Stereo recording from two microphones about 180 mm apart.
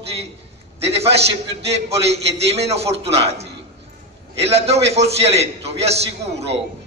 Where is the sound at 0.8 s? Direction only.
35° right (ahead or behind).